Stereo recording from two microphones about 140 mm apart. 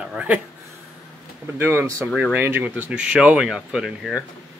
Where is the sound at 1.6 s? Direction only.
15° right (ahead or behind).